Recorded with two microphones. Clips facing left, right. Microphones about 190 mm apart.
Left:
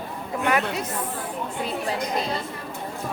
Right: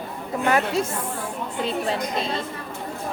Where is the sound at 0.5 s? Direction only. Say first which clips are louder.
Right 3 dB; 30° right (ahead or behind).